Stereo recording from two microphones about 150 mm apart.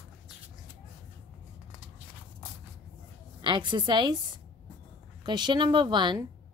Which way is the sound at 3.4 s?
30° right (ahead or behind).